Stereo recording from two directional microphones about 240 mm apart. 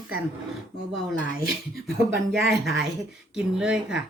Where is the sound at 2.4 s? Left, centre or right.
Centre.